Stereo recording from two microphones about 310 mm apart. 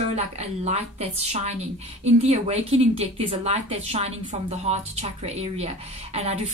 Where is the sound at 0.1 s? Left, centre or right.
Right.